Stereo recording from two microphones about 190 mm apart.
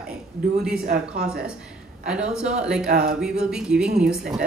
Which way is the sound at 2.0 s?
5° right (ahead or behind).